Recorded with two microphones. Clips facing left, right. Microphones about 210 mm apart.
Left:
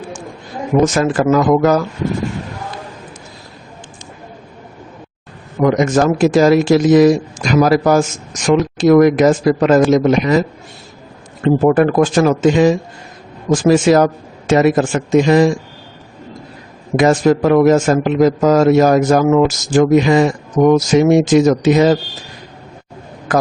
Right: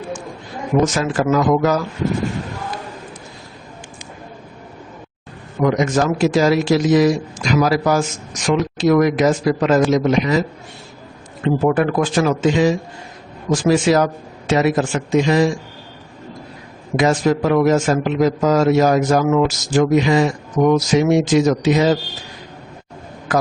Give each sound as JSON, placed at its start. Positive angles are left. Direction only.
{"t": 0.9, "sound": "a man's voice", "side_deg": 50}
{"t": 5.6, "sound": "a man's voice", "side_deg": 50}
{"t": 11.4, "sound": "a man's voice", "side_deg": 45}
{"t": 17.0, "sound": "a man's voice", "side_deg": 50}